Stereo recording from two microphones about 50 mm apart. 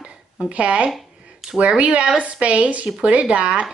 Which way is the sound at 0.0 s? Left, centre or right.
Right.